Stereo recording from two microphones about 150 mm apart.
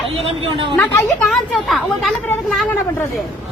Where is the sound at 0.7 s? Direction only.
15° left (ahead or behind).